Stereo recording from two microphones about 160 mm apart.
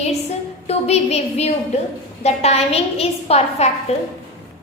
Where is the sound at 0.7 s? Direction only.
40° left (ahead or behind).